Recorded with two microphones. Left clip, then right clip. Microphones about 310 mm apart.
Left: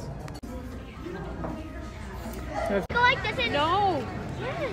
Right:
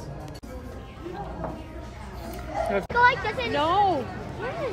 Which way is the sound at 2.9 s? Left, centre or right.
Right.